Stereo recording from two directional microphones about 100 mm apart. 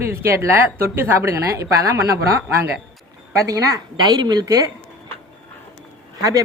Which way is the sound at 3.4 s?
35° right (ahead or behind).